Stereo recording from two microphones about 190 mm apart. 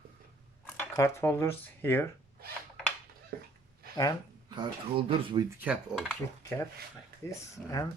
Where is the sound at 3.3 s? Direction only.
50° right (ahead or behind).